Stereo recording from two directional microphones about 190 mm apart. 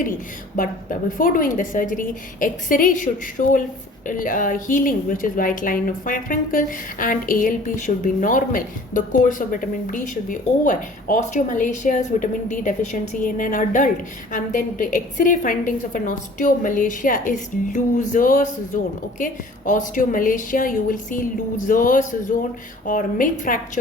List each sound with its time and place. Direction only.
0.5 s a woman's voice: 45° left (ahead or behind)